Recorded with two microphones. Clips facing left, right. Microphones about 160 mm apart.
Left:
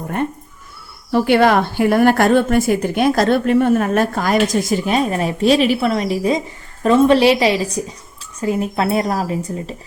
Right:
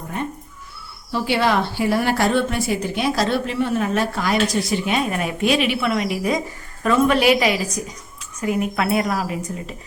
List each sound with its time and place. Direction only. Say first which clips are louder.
1.1 s a woman's voice: left 6 dB; 55° left (ahead or behind); by 9.7 s 35° left (ahead or behind)